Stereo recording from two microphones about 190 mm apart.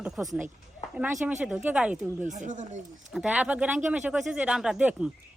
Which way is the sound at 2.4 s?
40° right (ahead or behind).